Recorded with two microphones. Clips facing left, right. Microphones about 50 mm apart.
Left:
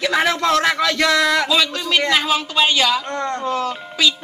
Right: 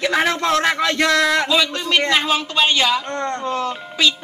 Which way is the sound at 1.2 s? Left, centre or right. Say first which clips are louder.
Even; centre.